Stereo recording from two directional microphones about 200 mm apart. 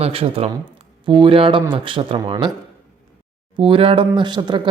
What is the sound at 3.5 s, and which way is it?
Speech, 25° right (ahead or behind).